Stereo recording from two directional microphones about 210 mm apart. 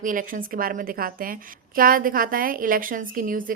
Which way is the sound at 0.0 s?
40° right (ahead or behind).